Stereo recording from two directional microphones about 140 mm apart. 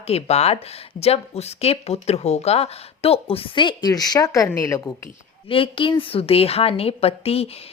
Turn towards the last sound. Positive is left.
turn(degrees=45)  # may be behind; listen again after turning